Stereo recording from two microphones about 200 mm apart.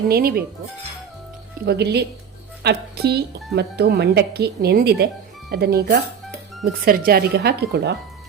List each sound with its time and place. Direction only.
0.1 s speech: 50° right (ahead or behind)
1.6 s speech: 55° right (ahead or behind)